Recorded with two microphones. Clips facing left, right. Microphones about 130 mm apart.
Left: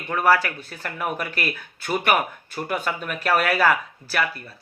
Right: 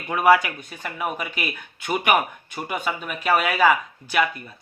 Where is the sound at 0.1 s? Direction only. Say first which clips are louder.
Right 2 dB; 15° right (ahead or behind).